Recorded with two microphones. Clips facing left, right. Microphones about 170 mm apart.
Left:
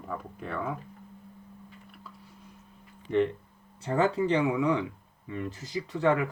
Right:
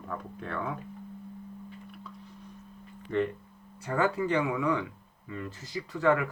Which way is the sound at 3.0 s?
20° left (ahead or behind).